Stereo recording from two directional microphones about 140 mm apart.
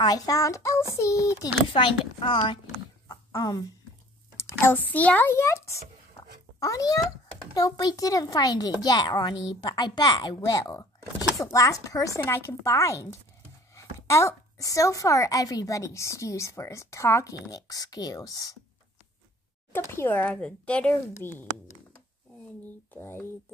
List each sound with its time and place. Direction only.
0.0 s a woman's voice: 25° left (ahead or behind)
1.7 s a woman's voice: 40° left (ahead or behind)
3.1 s a sound: 25° left (ahead or behind)
4.4 s a woman's voice: 20° left (ahead or behind)
19.7 s speech: 15° left (ahead or behind)